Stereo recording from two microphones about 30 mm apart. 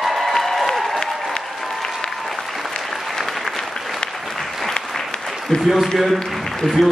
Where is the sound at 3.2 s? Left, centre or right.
Centre.